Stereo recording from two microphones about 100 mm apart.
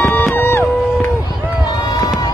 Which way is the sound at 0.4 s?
25° left (ahead or behind).